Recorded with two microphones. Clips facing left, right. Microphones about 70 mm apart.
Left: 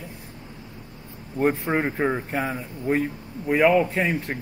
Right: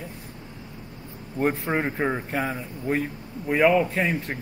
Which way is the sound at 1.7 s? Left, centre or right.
Centre.